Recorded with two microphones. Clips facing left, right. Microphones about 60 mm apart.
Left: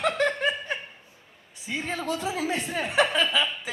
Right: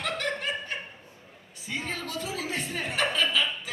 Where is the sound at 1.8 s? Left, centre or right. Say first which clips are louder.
Left 7 dB; left.